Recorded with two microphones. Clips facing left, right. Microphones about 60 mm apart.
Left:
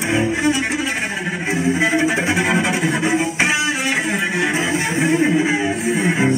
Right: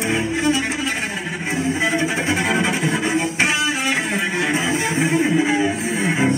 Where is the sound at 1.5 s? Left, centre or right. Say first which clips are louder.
Left 3 dB; centre.